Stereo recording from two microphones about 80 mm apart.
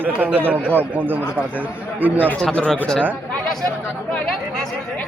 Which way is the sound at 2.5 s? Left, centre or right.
Centre.